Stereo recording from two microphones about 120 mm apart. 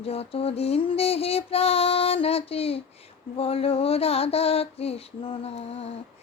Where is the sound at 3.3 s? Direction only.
55° left (ahead or behind).